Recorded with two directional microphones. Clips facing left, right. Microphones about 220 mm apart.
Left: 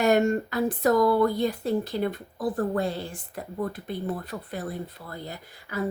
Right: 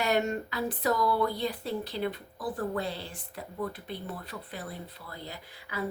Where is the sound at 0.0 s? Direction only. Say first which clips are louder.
Left 7 dB; 50° left (ahead or behind).